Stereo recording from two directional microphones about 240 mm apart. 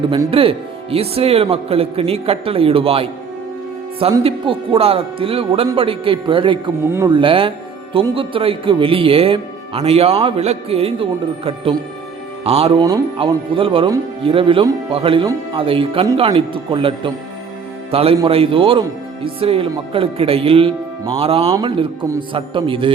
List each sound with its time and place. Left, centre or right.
0.1 s speech: right